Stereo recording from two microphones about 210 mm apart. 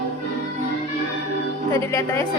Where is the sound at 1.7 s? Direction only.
10° left (ahead or behind).